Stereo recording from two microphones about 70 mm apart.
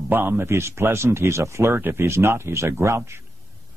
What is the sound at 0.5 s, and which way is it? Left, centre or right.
Speech, right.